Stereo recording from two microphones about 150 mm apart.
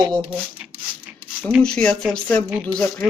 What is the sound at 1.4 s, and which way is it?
Speech, centre (ahead or behind).